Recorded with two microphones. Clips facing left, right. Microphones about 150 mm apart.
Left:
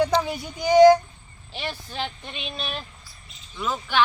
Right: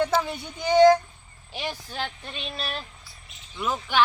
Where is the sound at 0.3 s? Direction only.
5° left (ahead or behind).